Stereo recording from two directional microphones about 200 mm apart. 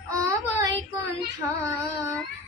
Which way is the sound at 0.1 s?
15° right (ahead or behind).